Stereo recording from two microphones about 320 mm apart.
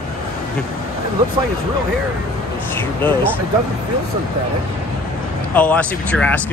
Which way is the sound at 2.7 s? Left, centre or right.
Centre.